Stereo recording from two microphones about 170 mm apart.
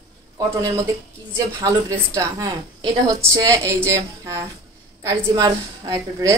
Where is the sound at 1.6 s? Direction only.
20° right (ahead or behind).